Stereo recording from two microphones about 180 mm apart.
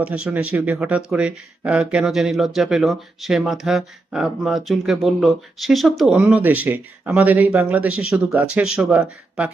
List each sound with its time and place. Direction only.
0.0 s speech: 5° right (ahead or behind)